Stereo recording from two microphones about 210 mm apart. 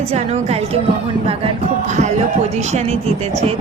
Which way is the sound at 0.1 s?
30° right (ahead or behind).